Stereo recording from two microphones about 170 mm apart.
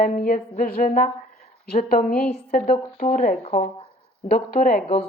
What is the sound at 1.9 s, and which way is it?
Speech, 60° left (ahead or behind).